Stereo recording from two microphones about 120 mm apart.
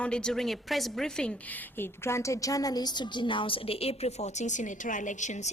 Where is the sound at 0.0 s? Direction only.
5° left (ahead or behind).